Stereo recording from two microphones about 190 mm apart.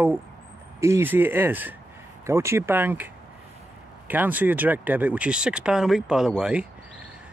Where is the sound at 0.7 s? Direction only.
15° right (ahead or behind).